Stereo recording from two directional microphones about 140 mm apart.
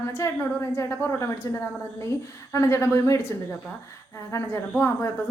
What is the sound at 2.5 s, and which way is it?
Speech, 20° left (ahead or behind).